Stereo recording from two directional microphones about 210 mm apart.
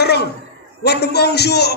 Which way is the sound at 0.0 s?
50° left (ahead or behind).